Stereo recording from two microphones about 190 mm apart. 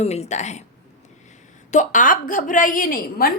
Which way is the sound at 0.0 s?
35° left (ahead or behind).